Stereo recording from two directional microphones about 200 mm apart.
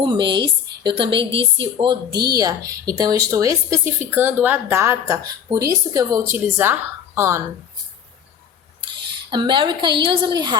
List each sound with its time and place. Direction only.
0.0 s a woman's voice: 25° right (ahead or behind)
9.3 s a woman's voice: 25° right (ahead or behind)